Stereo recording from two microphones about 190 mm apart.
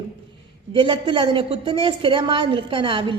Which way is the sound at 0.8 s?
25° right (ahead or behind).